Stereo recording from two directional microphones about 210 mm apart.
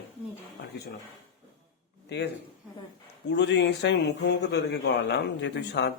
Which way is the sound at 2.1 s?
55° left (ahead or behind).